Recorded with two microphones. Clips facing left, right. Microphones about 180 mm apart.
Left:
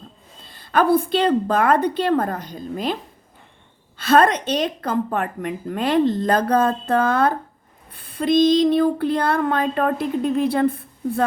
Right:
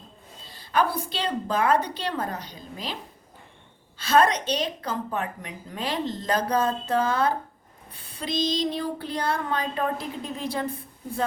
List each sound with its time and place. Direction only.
0.4 s a woman's voice: 55° left (ahead or behind)